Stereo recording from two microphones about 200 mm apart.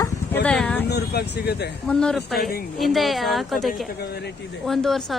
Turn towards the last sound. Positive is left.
turn(degrees=0)  # may be behind; listen again after turning